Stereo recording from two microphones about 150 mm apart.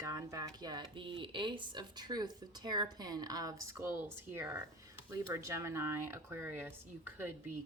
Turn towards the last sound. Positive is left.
turn(degrees=-15)  # may be behind; listen again after turning